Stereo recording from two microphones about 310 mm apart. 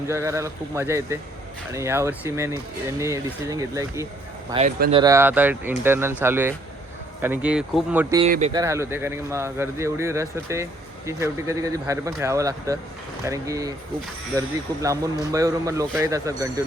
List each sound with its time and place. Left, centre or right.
0.1 s speech: centre
4.5 s speech: right; by 8.2 s centre
8.2 s speech: right
8.6 s speech: centre